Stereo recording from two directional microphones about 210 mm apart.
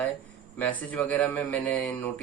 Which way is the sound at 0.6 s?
10° left (ahead or behind).